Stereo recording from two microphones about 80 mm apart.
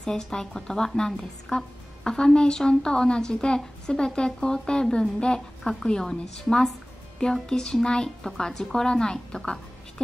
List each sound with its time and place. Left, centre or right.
0.0 s a woman's voice: centre